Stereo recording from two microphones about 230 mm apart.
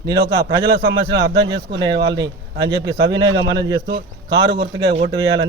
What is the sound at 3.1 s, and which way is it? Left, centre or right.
Speech, centre.